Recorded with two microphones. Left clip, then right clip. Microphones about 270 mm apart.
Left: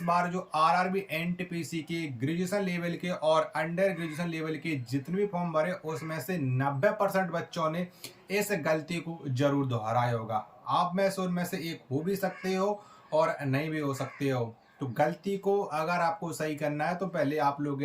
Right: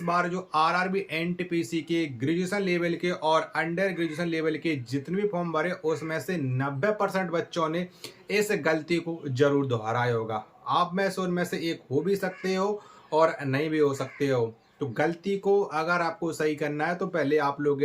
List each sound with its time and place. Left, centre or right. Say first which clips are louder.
0.0 s speech: right 2 dB; centre